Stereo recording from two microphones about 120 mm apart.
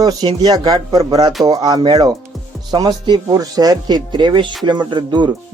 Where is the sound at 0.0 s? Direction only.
35° right (ahead or behind).